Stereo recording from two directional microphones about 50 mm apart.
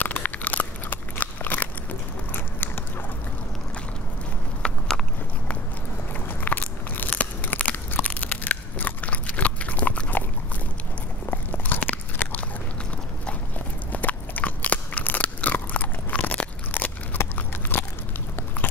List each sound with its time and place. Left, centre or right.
0.0 s crunch: left
4.6 s walk: left
6.1 s crunch: left
11.2 s biting: left
13.9 s crunch: left
16.7 s biting: left